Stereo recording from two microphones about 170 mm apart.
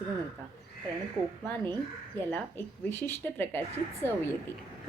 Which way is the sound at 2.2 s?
10° left (ahead or behind).